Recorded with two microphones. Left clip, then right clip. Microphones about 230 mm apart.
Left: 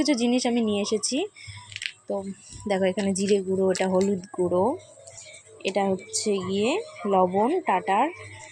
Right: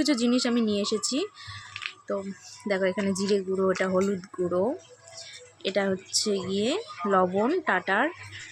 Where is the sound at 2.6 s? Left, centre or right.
Centre.